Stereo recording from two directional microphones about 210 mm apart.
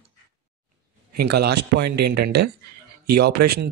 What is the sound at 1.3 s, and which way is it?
Speech, 50° right (ahead or behind).